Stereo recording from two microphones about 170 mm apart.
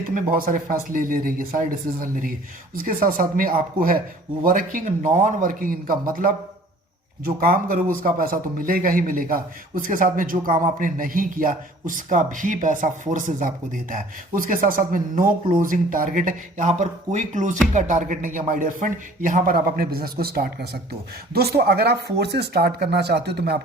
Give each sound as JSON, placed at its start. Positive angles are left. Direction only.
{"t": 0.1, "sound": "a man's voice", "side_deg": -55}